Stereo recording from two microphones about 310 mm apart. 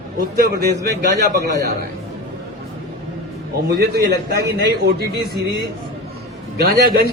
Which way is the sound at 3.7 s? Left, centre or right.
Right.